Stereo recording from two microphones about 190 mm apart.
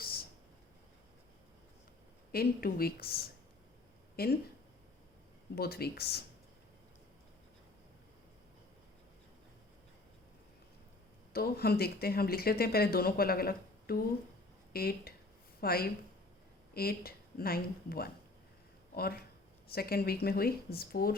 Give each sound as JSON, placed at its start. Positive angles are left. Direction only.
{"t": 0.0, "sound": "a sound", "side_deg": 50}
{"t": 2.3, "sound": "speech", "side_deg": 55}
{"t": 5.5, "sound": "speech", "side_deg": 55}
{"t": 11.3, "sound": "a woman's voice", "side_deg": 55}